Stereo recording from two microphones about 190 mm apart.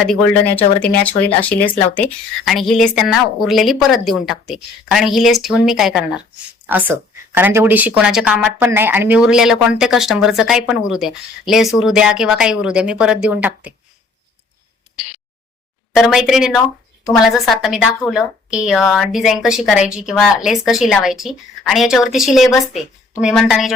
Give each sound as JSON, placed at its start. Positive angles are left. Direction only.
{"t": 0.1, "sound": "speech", "side_deg": 10}
{"t": 16.0, "sound": "speech", "side_deg": 0}